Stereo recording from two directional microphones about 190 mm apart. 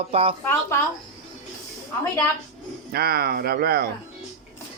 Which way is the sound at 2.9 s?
55° right (ahead or behind).